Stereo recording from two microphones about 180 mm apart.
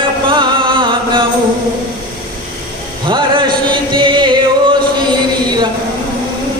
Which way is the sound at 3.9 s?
25° right (ahead or behind).